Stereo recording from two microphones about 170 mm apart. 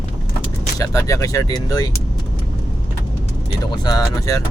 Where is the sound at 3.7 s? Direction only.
25° left (ahead or behind).